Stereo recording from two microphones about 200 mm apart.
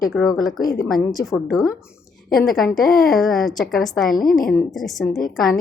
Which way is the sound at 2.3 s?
Centre (ahead or behind).